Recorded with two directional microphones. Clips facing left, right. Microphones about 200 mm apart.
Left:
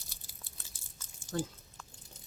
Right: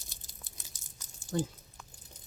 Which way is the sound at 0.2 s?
45° right (ahead or behind).